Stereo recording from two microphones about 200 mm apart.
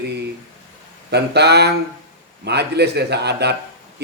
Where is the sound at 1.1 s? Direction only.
55° right (ahead or behind).